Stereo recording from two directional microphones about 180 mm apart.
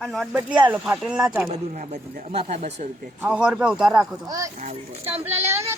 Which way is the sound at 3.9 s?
20° right (ahead or behind).